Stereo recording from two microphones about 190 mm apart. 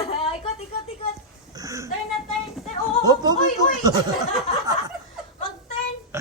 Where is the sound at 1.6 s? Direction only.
15° right (ahead or behind).